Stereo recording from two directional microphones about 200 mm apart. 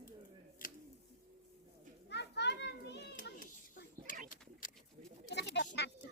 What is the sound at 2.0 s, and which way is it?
Children playing, 60° left (ahead or behind).